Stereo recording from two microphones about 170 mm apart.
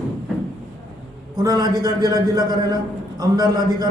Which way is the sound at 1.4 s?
20° right (ahead or behind).